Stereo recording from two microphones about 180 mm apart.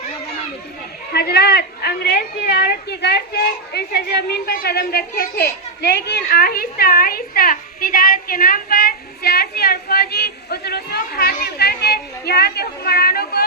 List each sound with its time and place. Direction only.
1.1 s a woman's voice: 65° left (ahead or behind)